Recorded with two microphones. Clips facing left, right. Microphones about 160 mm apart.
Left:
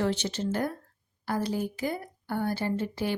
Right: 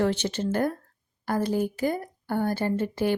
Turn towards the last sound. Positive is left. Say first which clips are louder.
# right 4 dB
turn(degrees=-50)  # may be behind; listen again after turning